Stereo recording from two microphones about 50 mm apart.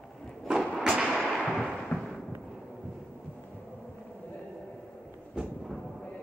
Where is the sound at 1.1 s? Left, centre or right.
Centre.